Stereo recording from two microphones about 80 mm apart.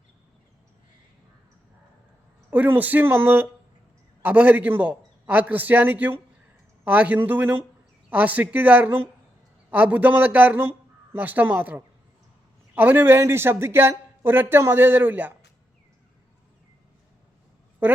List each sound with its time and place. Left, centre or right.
2.5 s a man's voice: right